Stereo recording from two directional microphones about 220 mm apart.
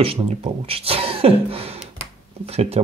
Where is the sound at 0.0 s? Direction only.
25° right (ahead or behind).